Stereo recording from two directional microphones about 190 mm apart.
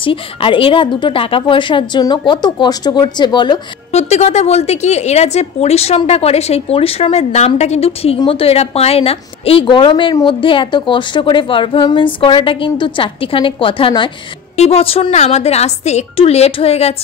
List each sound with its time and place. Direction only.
0.0 s a woman's voice: 25° left (ahead or behind)
3.9 s a woman's voice: 35° left (ahead or behind)